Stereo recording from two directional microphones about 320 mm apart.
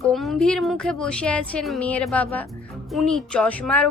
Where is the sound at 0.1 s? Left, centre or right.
Centre.